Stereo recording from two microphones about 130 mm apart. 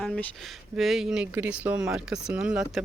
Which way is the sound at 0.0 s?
5° left (ahead or behind).